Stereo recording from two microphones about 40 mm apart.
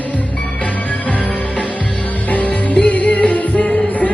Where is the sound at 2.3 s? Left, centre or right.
Left.